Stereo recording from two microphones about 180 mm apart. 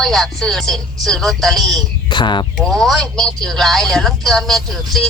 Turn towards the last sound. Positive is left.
turn(degrees=0)  # may be behind; listen again after turning